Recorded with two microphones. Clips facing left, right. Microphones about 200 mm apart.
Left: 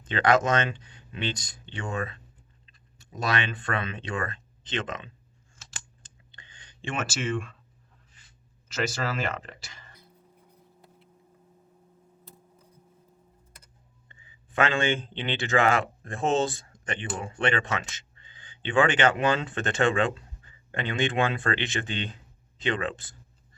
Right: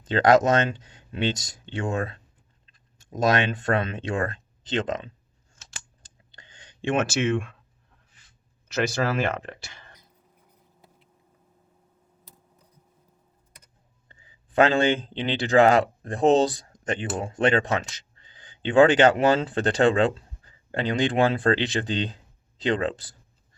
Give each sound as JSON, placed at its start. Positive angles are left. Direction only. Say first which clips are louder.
{"t": 0.1, "sound": "speech", "louder": "right 5 dB", "side_deg": -40}
{"t": 6.8, "sound": "speech", "louder": "right 7 dB", "side_deg": -55}
{"t": 9.0, "sound": "speech", "louder": "right 6 dB", "side_deg": -60}
{"t": 14.1, "sound": "speech", "louder": "right 1 dB", "side_deg": -40}